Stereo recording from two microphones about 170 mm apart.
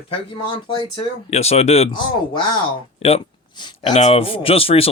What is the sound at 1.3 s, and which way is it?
Speech, 40° left (ahead or behind).